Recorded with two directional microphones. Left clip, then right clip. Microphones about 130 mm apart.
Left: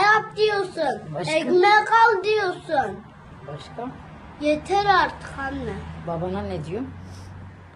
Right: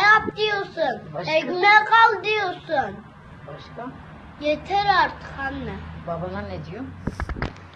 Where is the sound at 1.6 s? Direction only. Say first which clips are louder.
Right 2 dB; 25° left (ahead or behind).